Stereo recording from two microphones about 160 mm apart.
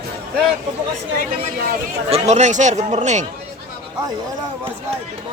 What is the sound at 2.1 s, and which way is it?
Speech, 45° right (ahead or behind).